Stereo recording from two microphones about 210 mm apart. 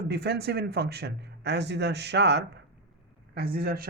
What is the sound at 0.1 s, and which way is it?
Speech, 50° right (ahead or behind).